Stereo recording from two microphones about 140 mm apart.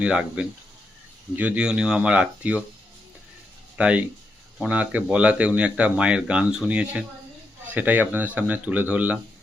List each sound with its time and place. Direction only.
0.0 s speech: 5° right (ahead or behind)
3.8 s speech: 10° right (ahead or behind)